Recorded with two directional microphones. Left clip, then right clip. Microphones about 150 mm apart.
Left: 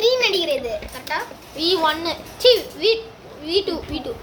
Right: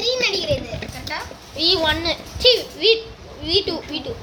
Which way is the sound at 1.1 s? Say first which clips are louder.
Left 4 dB; 90° left.